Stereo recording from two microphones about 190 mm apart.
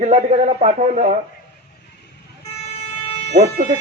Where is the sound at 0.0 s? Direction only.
35° right (ahead or behind).